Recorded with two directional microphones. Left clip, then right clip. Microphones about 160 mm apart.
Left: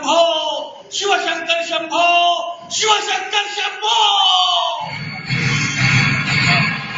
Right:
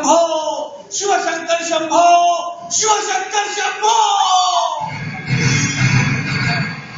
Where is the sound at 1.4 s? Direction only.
30° right (ahead or behind).